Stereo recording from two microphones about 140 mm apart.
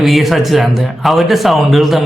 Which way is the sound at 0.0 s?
Centre (ahead or behind).